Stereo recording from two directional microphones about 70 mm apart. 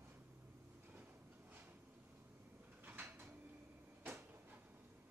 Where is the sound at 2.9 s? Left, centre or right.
Right.